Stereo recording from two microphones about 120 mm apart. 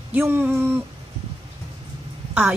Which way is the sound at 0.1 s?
20° right (ahead or behind).